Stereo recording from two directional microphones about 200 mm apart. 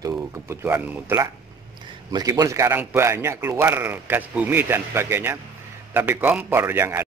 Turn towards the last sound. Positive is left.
turn(degrees=-10)  # may be behind; listen again after turning